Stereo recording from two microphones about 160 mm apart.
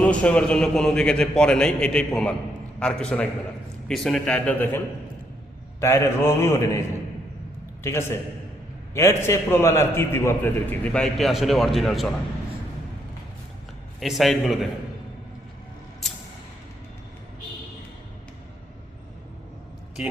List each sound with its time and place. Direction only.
0.0 s a man's voice: 10° left (ahead or behind)
5.8 s a man's voice: 15° left (ahead or behind)
7.9 s a man's voice: 15° left (ahead or behind); by 12.1 s centre (ahead or behind)
14.0 s a man's voice: centre (ahead or behind)
20.0 s speech: 10° right (ahead or behind)